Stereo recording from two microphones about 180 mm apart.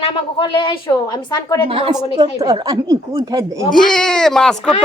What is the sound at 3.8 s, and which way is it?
Speech, 5° left (ahead or behind).